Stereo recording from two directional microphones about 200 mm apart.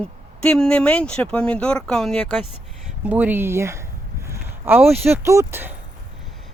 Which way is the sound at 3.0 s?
10° right (ahead or behind).